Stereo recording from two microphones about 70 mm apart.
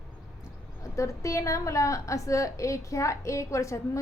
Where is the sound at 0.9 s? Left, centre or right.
Left.